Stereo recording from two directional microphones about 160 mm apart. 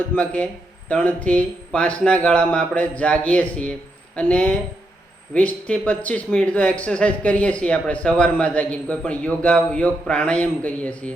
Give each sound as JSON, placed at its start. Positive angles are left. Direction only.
{"t": 0.0, "sound": "speech", "side_deg": 10}